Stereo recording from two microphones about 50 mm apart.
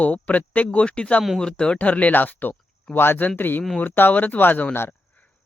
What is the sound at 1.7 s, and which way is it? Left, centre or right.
Speech, left.